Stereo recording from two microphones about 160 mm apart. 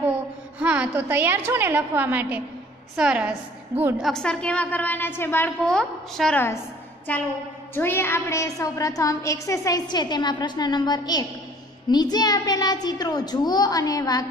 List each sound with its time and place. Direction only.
0.6 s a woman's voice: 10° right (ahead or behind)
4.0 s a woman's voice: 5° left (ahead or behind); by 14.2 s 25° left (ahead or behind)